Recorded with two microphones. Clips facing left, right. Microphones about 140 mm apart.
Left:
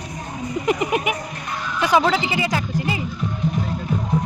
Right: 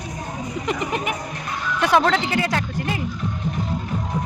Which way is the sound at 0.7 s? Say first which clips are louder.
Left 5 dB; 5° left (ahead or behind).